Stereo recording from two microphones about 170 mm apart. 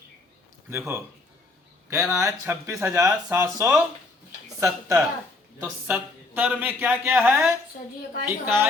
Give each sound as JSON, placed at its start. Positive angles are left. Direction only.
{"t": 0.7, "sound": "speech", "side_deg": -15}